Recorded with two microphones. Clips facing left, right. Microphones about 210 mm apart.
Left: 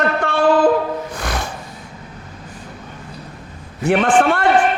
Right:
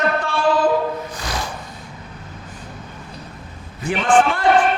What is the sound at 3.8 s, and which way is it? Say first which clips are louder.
Speech: left 2 dB; 65° left (ahead or behind).